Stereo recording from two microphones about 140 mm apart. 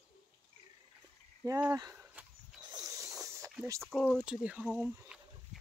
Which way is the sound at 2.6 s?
25° right (ahead or behind).